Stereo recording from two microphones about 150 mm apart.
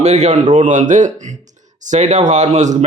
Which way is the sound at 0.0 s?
50° right (ahead or behind).